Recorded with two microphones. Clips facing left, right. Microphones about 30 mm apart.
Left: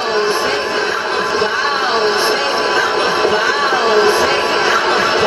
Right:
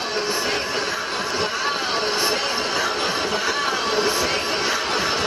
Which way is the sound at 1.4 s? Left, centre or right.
Left.